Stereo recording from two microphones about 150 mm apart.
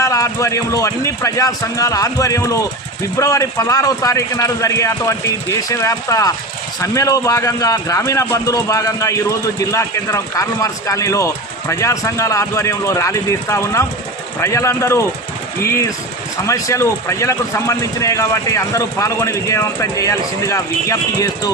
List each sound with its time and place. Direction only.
0.0 s speech: 20° left (ahead or behind)